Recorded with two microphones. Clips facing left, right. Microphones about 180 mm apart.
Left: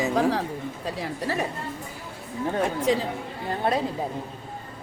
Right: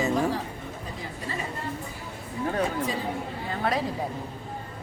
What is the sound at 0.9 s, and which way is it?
Speech, 75° left (ahead or behind).